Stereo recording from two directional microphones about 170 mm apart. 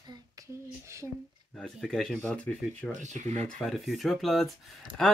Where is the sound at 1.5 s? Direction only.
Centre (ahead or behind).